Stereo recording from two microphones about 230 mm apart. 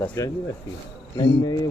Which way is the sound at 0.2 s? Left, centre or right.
Centre.